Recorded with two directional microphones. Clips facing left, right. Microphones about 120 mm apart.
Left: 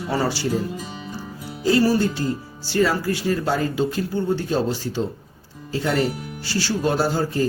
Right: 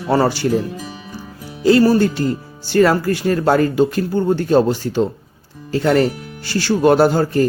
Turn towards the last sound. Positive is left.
turn(degrees=-60)  # may be behind; listen again after turning